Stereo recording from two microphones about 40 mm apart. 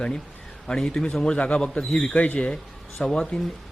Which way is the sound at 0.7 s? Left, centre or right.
Left.